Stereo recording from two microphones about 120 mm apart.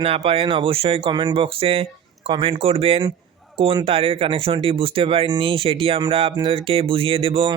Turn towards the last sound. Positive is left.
turn(degrees=-50)  # may be behind; listen again after turning